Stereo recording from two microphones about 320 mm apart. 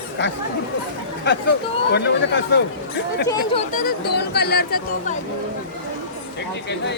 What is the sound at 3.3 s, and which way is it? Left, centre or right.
Speech, centre.